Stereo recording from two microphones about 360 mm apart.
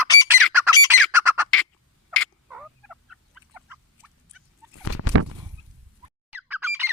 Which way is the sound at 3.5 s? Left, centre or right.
Centre.